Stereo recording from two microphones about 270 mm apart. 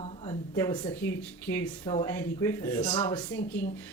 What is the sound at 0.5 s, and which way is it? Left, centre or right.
A woman's voice, centre.